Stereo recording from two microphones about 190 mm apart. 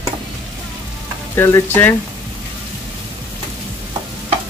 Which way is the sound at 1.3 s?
10° left (ahead or behind).